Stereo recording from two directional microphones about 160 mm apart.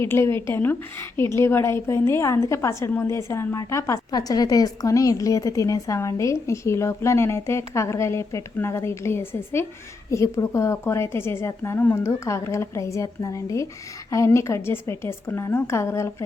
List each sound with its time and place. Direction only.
0.0 s a woman's voice: 15° left (ahead or behind)